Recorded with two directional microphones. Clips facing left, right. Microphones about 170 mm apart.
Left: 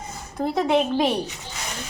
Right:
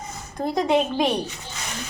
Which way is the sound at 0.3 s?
5° left (ahead or behind).